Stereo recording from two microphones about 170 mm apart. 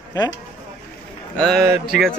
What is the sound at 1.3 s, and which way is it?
Speech, 5° left (ahead or behind).